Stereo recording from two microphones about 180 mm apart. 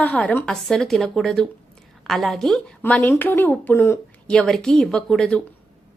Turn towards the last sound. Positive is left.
turn(degrees=5)  # may be behind; listen again after turning